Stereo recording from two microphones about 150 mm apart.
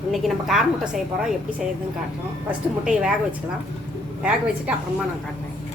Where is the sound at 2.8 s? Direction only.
5° right (ahead or behind).